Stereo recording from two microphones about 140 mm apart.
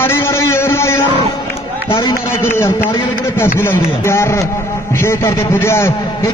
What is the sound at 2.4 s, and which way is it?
A man's voice, 20° left (ahead or behind).